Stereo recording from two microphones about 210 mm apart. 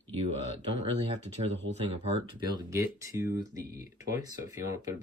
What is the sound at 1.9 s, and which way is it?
Speech, 25° right (ahead or behind).